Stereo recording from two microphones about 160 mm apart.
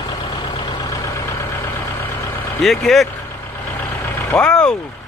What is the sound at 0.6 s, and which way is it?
Vehicle, 30° left (ahead or behind).